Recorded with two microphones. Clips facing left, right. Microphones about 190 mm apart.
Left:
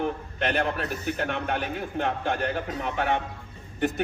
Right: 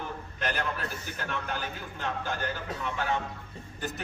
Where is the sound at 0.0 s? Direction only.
65° left (ahead or behind).